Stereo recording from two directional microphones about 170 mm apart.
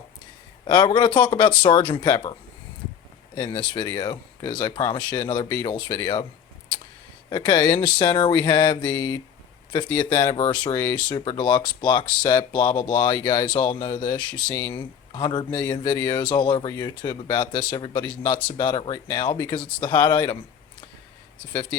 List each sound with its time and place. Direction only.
0.6 s speech: 25° left (ahead or behind)
3.3 s speech: 25° left (ahead or behind)
7.3 s speech: 25° left (ahead or behind)
14.5 s speech: 15° left (ahead or behind)
14.8 s speech: 25° left (ahead or behind)